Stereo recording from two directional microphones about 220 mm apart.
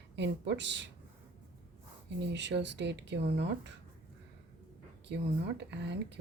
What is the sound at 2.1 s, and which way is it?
Speech, 55° right (ahead or behind).